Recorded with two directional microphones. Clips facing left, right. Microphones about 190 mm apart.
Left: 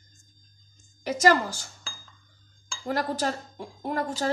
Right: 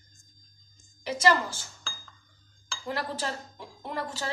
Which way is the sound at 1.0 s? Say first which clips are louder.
Left 3 dB; 45° left (ahead or behind).